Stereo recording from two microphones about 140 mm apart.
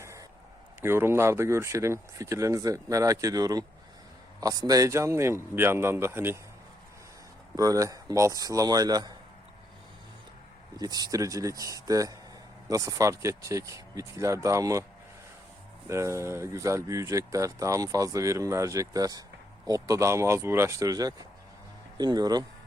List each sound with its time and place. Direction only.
0.0 s a sound: 20° right (ahead or behind)
0.8 s speech: 15° right (ahead or behind)
7.5 s speech: 25° right (ahead or behind)
10.8 s speech: 25° right (ahead or behind)
15.9 s speech: 20° right (ahead or behind)